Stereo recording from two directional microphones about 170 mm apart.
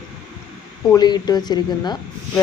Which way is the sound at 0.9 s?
25° left (ahead or behind).